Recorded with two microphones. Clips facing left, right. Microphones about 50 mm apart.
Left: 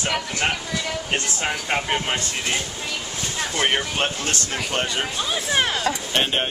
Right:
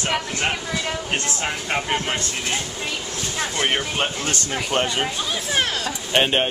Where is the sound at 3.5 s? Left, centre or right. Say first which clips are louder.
Left 1 dB; centre.